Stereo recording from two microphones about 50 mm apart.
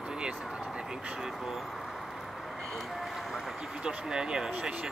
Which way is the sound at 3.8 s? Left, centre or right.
Centre.